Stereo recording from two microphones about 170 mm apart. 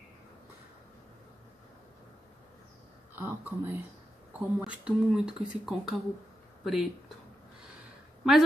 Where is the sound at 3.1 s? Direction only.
10° right (ahead or behind).